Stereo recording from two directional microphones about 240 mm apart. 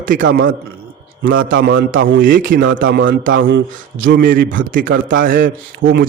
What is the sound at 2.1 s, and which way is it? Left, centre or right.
Speech, right.